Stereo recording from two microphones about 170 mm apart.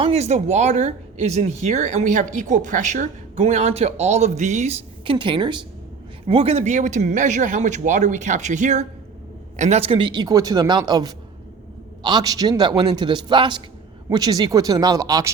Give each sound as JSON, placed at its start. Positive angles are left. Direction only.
{"t": 0.0, "sound": "speech", "side_deg": -40}